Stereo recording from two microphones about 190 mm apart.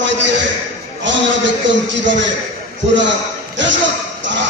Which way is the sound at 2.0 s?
75° right (ahead or behind).